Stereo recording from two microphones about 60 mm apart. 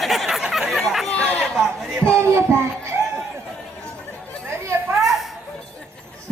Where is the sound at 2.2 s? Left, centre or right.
Right.